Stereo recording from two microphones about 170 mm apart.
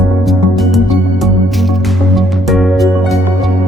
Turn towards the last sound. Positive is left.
turn(degrees=0)  # may be behind; listen again after turning